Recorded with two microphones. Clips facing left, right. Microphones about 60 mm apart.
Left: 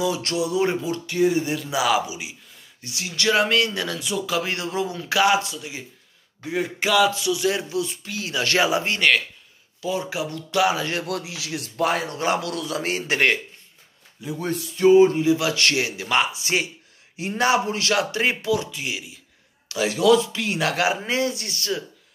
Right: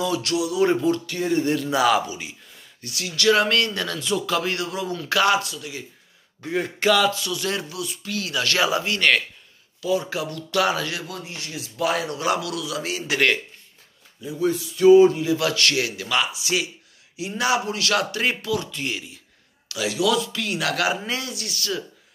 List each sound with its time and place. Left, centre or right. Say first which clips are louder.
0.2 s a man's voice: right 1 dB; left
0.7 s speech: right 4 dB; centre
2.8 s speech: right 2 dB; left
6.5 s speech: right 1 dB; centre
7.1 s speech: left 3 dB; centre
7.7 s speech: left 3 dB; left
11.1 s a man's voice: left 5 dB; left
11.6 s a man's voice: left 1 dB; left
11.9 s a man's voice: right 2 dB; left
14.8 s speech: right 1 dB; left
18.8 s speech: right 1 dB; centre
19.7 s a man's voice: left 4 dB; left